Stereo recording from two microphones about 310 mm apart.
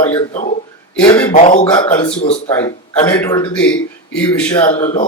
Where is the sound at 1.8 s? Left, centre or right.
Centre.